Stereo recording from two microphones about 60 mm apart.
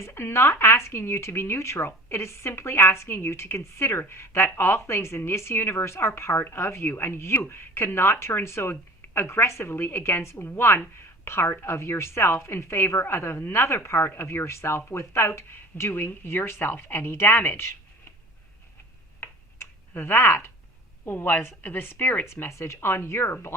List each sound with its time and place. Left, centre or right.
0.0 s speech: left
19.2 s a sound: left
21.0 s a woman's voice: left
22.3 s speech: left